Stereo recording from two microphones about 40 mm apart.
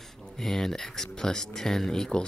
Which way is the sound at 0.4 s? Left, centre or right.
Centre.